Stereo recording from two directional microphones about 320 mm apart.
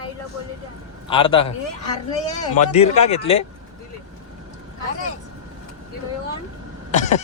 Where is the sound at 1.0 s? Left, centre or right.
Centre.